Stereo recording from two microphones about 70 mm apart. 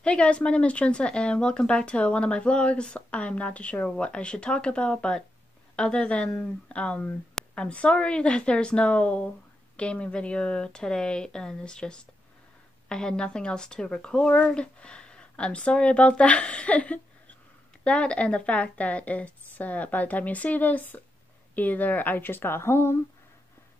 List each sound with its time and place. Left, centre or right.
0.0 s a woman's voice: centre; by 22.9 s left